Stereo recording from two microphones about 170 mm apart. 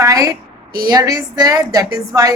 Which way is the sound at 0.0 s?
20° right (ahead or behind).